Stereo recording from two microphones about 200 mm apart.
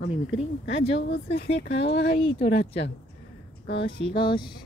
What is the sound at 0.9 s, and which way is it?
Speech, 60° left (ahead or behind).